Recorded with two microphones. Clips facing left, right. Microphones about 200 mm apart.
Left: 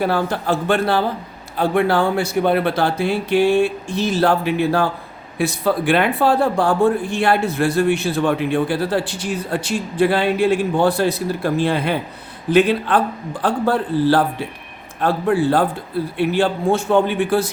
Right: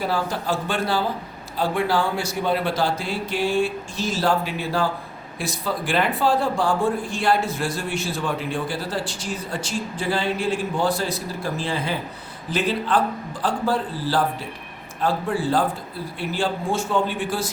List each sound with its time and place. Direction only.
0.0 s a man's voice: 60° left (ahead or behind)